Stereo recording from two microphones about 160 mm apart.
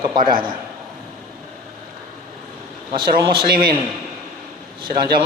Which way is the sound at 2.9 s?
30° right (ahead or behind).